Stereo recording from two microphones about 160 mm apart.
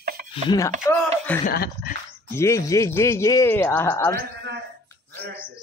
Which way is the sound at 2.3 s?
15° left (ahead or behind).